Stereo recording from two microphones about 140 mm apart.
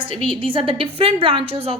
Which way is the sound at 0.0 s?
40° right (ahead or behind).